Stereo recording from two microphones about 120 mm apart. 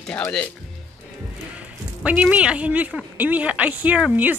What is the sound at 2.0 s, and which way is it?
A woman's voice, 10° right (ahead or behind).